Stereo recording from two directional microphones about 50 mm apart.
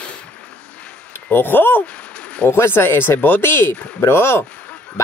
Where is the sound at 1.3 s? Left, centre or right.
Left.